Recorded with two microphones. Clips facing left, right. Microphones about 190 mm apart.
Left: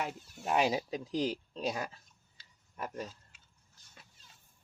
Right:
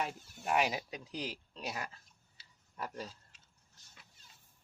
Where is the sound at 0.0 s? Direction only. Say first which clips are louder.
Left 1 dB; 25° left (ahead or behind).